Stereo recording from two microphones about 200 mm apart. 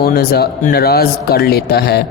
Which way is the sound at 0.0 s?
50° left (ahead or behind).